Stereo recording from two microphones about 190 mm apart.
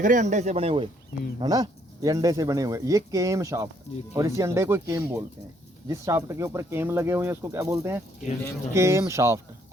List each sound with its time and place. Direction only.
0.0 s speech: 40° right (ahead or behind); by 9.4 s 15° right (ahead or behind)